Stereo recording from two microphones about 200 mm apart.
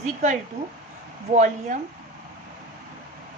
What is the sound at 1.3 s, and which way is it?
Speech, 35° right (ahead or behind).